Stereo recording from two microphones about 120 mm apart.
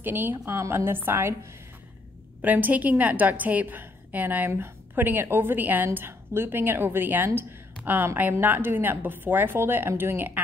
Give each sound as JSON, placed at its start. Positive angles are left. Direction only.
{"t": 0.0, "sound": "a woman's voice", "side_deg": -20}